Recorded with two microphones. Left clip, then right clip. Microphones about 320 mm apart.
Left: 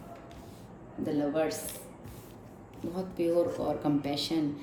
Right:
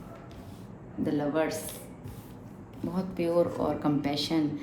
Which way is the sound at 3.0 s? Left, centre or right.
Centre.